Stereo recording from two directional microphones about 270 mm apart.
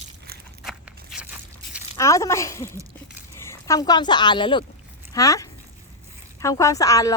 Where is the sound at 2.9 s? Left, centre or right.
Centre.